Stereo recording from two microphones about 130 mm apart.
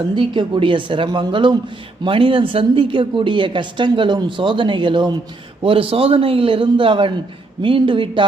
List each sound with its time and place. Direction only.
0.2 s a woman's voice: 40° right (ahead or behind)